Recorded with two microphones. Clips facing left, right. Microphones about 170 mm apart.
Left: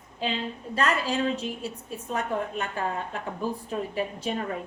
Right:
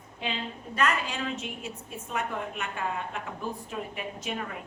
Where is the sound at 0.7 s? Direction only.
30° left (ahead or behind).